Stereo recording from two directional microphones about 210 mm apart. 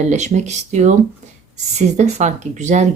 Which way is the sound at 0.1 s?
35° right (ahead or behind).